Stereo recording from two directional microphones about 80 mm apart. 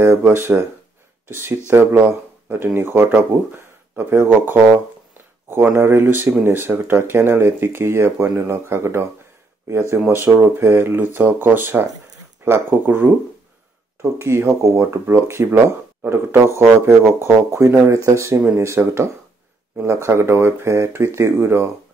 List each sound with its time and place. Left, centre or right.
0.0 s speech: right
4.1 s speech: right
5.8 s speech: right
14.0 s speech: right